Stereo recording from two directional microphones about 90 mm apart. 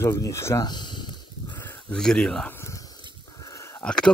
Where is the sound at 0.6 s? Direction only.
55° left (ahead or behind).